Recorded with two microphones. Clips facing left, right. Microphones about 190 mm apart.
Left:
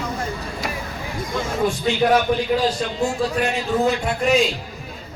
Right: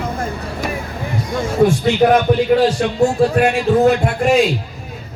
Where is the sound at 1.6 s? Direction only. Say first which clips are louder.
Right 6 dB; 70° right (ahead or behind).